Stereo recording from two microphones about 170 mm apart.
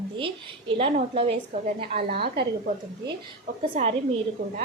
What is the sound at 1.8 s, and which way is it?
Speech, 65° right (ahead or behind).